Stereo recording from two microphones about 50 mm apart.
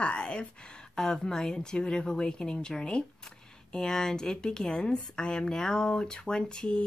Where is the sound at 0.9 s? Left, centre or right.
Centre.